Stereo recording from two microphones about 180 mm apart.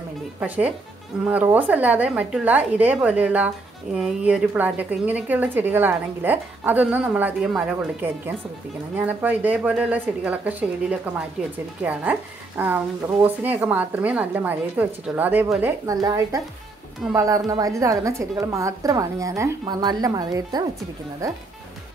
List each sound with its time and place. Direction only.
0.4 s a woman's voice: 10° right (ahead or behind)